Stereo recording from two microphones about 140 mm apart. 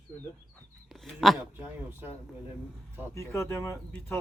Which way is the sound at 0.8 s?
Centre (ahead or behind).